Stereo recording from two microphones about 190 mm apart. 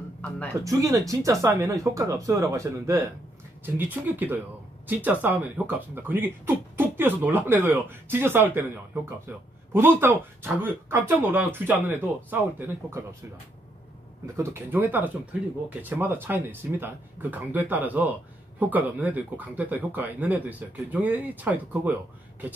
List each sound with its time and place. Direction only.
0.7 s speech: 20° right (ahead or behind)
14.2 s speech: 15° right (ahead or behind)